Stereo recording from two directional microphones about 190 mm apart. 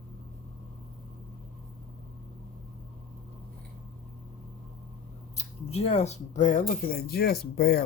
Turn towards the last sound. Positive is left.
turn(degrees=55)  # may be behind; listen again after turning